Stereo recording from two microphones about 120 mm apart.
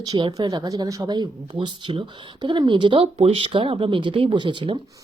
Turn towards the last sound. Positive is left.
turn(degrees=-40)  # may be behind; listen again after turning